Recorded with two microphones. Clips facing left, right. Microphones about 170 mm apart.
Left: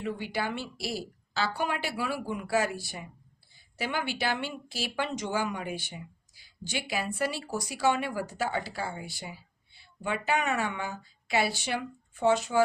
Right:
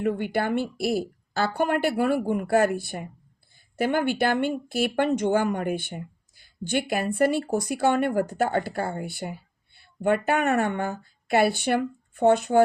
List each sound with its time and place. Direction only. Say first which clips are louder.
0.0 s a woman's voice: right 7 dB; 55° right (ahead or behind)